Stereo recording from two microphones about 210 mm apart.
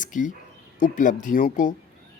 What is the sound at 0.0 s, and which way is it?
Speech, 40° left (ahead or behind).